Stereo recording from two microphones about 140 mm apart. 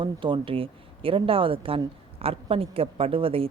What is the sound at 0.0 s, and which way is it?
Speech, 35° right (ahead or behind).